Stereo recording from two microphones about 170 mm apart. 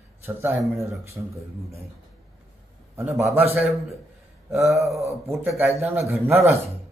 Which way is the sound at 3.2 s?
35° right (ahead or behind).